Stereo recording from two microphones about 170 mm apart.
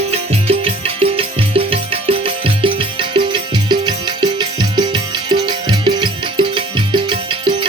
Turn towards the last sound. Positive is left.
turn(degrees=-30)  # may be behind; listen again after turning